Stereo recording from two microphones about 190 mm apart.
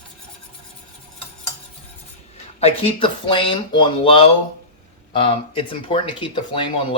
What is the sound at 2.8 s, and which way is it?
Speech, 30° left (ahead or behind).